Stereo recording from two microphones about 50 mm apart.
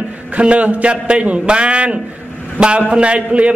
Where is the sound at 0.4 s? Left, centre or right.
Right.